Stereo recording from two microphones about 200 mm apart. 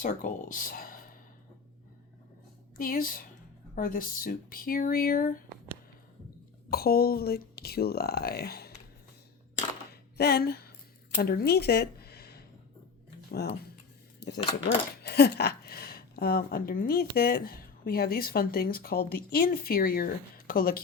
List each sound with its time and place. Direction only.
0.0 s speech: 40° left (ahead or behind)
2.7 s speech: 45° left (ahead or behind)
6.7 s speech: 50° left (ahead or behind)
9.9 s a sound: 50° left (ahead or behind)
13.3 s speech: 55° left (ahead or behind)
14.2 s dishes: 55° left (ahead or behind)
14.6 s speech: 55° left (ahead or behind)